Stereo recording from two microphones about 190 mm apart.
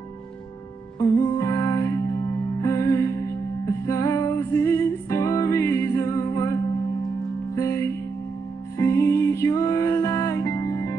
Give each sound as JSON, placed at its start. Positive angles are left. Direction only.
{"t": 0.9, "sound": "music", "side_deg": 15}